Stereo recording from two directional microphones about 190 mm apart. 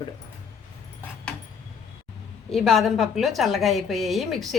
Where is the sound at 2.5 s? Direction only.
Centre (ahead or behind).